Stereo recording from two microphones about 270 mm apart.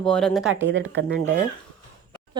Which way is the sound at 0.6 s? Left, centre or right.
Right.